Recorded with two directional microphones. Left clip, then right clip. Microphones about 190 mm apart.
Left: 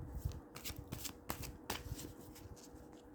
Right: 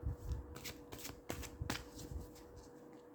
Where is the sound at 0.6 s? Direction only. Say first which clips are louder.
Left 1 dB; 25° left (ahead or behind).